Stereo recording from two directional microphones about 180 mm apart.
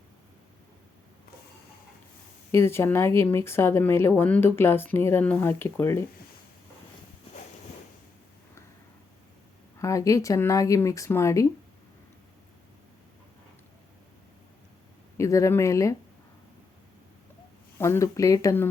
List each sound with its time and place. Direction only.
2.5 s speech: 15° left (ahead or behind)
9.7 s speech: 15° left (ahead or behind)
15.2 s speech: 15° left (ahead or behind)
17.7 s speech: 15° left (ahead or behind)